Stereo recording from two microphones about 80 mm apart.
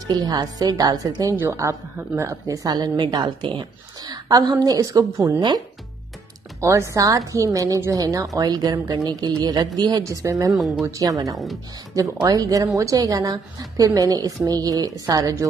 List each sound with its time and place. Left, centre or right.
0.1 s speech: right
1.3 s speech: right
2.1 s speech: right
6.6 s speech: right
10.0 s speech: right
10.5 s speech: centre
10.9 s speech: right